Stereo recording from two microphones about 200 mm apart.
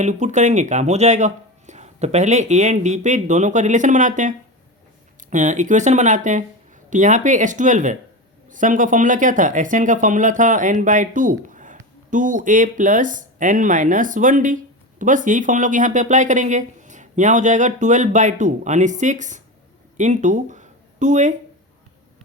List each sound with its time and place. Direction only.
0.0 s speech: 35° right (ahead or behind)